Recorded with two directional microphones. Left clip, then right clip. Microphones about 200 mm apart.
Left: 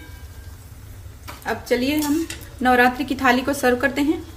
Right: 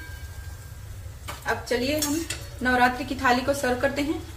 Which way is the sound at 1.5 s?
55° left (ahead or behind).